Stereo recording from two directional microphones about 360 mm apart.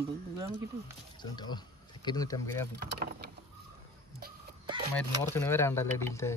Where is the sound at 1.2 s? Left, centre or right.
Centre.